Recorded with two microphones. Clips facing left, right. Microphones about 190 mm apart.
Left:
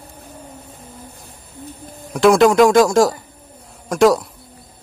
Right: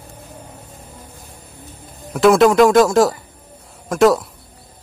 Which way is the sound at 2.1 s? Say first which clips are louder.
Even; centre (ahead or behind).